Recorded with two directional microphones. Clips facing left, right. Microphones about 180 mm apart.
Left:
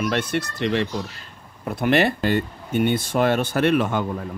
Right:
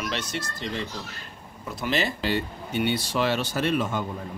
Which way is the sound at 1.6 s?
60° left (ahead or behind).